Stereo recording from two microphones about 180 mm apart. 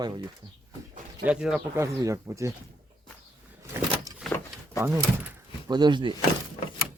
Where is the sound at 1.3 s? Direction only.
5° right (ahead or behind).